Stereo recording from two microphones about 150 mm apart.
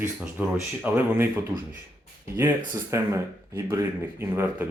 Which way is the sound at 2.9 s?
15° right (ahead or behind).